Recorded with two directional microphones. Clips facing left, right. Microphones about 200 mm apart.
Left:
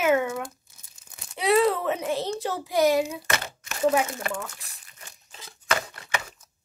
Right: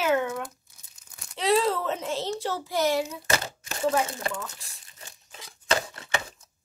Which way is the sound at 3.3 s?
30° right (ahead or behind).